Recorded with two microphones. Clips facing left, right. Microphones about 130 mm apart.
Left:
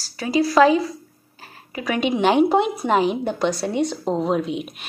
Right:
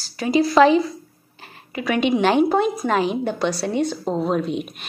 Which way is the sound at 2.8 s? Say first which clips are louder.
Left 1 dB; 20° left (ahead or behind).